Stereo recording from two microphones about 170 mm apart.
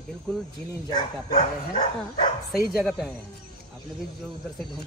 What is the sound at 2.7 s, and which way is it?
Speech, centre (ahead or behind).